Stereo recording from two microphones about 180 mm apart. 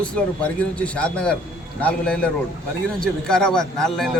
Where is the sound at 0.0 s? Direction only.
5° left (ahead or behind).